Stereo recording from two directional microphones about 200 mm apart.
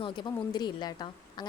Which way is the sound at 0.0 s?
20° left (ahead or behind).